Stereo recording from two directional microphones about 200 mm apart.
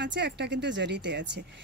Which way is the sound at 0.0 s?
60° right (ahead or behind).